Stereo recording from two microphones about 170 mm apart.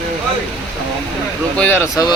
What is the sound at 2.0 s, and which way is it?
Speech, 20° left (ahead or behind).